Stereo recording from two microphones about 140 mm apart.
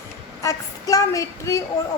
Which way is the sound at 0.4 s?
25° left (ahead or behind).